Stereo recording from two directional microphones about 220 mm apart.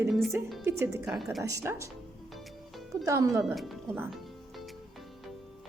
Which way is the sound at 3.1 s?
15° right (ahead or behind).